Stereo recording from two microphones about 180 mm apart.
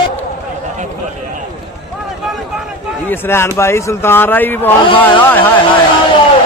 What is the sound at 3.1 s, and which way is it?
Speech, 15° left (ahead or behind).